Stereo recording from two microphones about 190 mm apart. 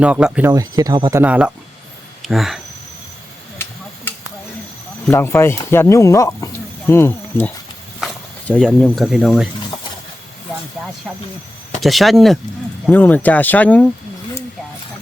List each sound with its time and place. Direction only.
0.0 s speech: 5° right (ahead or behind)
0.5 s speech: 20° right (ahead or behind)
1.2 s speech: 5° right (ahead or behind)
5.0 s speech: 10° left (ahead or behind)
11.8 s speech: centre (ahead or behind)